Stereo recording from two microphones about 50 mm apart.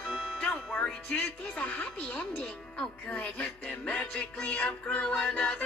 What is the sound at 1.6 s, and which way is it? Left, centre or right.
Music, left.